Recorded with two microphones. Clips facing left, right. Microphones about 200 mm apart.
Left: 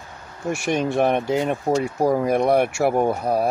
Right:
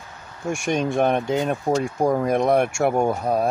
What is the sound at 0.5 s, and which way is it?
Speech, centre (ahead or behind).